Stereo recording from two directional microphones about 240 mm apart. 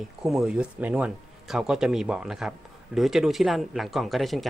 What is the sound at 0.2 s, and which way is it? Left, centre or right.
Speech, centre.